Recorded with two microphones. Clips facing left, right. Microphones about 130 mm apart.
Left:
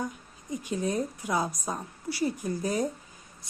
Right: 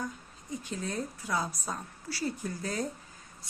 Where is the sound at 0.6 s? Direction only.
15° left (ahead or behind).